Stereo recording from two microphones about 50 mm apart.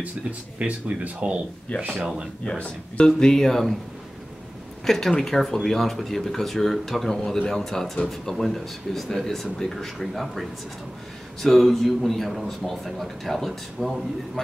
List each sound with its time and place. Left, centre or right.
0.6 s speech: right
1.7 s speech: left; by 3.7 s centre
4.8 s speech: centre
11.4 s speech: centre